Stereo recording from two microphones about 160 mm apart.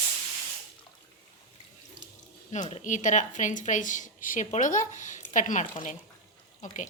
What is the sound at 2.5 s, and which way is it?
Speech, 45° left (ahead or behind).